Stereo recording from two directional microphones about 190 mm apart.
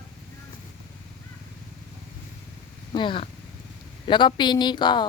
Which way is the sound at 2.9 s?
25° left (ahead or behind).